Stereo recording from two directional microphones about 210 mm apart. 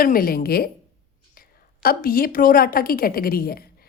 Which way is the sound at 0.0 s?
45° left (ahead or behind).